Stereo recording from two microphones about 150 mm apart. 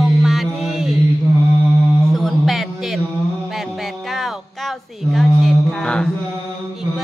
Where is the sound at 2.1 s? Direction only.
Centre (ahead or behind).